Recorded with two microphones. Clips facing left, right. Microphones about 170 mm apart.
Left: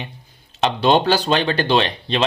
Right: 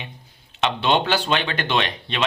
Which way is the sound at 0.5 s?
40° left (ahead or behind).